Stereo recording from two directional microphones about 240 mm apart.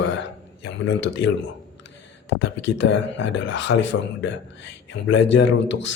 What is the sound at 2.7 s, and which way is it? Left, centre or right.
A man's voice, left.